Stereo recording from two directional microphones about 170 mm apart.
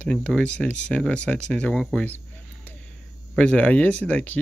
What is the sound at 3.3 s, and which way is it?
Speech, 5° left (ahead or behind).